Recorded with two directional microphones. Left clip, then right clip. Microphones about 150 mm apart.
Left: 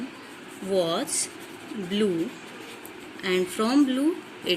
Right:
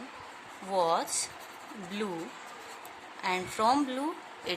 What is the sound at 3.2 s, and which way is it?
Speech, 90° right.